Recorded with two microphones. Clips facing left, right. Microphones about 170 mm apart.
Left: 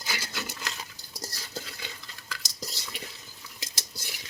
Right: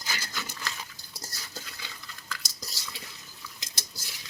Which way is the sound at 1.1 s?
35° left (ahead or behind).